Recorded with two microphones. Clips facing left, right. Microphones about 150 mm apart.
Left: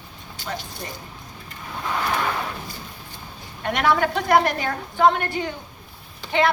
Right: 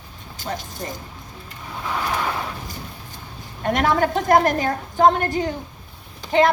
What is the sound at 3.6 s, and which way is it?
A woman's voice, 40° right (ahead or behind).